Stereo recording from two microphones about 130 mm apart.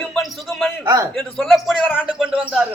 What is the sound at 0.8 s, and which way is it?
Speech, 25° right (ahead or behind).